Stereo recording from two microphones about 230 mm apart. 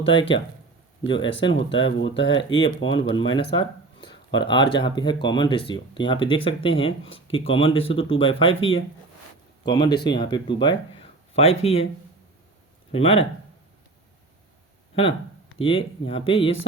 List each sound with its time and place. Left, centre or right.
0.0 s speech: left
3.5 s a sound: left
4.3 s speech: centre
12.9 s speech: left
15.5 s speech: left